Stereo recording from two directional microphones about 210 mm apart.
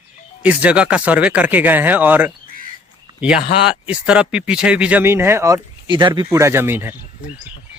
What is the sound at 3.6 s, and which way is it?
Speech, 5° right (ahead or behind).